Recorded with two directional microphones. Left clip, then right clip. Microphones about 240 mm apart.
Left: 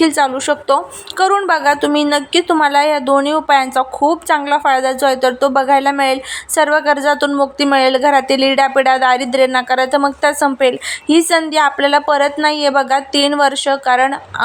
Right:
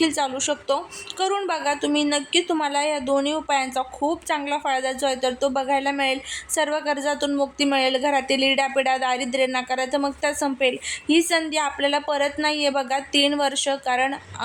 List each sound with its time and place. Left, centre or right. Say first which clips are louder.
0.0 s a woman's voice: left 9 dB; centre